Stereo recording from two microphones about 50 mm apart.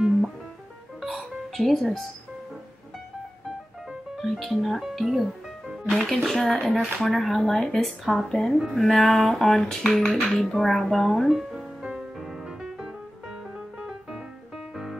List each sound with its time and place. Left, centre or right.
1.0 s music: centre
4.2 s music: centre
11.8 s music: right